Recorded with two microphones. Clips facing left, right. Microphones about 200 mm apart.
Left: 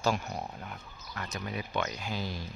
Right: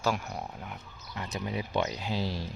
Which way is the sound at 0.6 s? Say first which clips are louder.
Right 1 dB; 15° right (ahead or behind).